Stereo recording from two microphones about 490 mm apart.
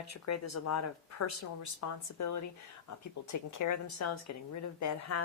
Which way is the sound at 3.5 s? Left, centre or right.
Left.